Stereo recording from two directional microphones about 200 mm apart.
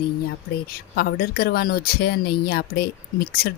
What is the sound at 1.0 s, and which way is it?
Speech, 50° left (ahead or behind).